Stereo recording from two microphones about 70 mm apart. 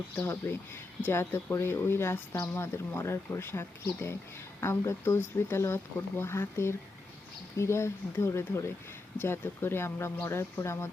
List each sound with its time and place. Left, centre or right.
0.4 s speech: left
9.1 s speech: left